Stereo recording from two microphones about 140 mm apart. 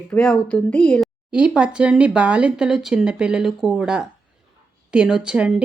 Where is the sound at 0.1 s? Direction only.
5° left (ahead or behind).